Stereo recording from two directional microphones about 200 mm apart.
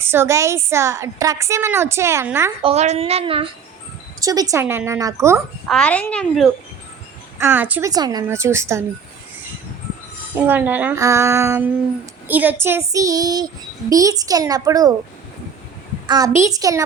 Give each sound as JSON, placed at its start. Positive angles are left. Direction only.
{"t": 0.0, "sound": "a woman's voice", "side_deg": -10}
{"t": 2.6, "sound": "speech", "side_deg": -30}
{"t": 4.2, "sound": "a woman's voice", "side_deg": -15}
{"t": 5.6, "sound": "speech", "side_deg": 5}
{"t": 7.3, "sound": "a woman's voice", "side_deg": -10}
{"t": 10.3, "sound": "a woman's voice", "side_deg": -10}
{"t": 16.0, "sound": "a woman's voice", "side_deg": -20}